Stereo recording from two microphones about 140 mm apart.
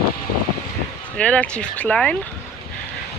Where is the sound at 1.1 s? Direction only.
10° left (ahead or behind).